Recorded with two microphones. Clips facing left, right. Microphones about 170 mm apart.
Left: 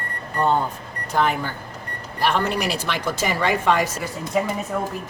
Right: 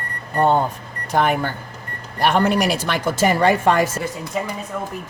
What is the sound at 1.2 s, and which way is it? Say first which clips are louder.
Speech: right 3 dB; 55° right (ahead or behind).